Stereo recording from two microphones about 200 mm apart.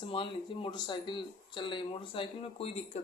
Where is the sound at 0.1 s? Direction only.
25° left (ahead or behind).